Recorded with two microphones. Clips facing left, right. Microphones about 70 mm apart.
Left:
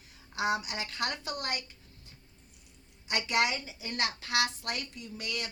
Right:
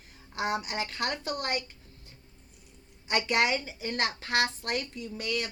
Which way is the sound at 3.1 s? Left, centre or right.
Right.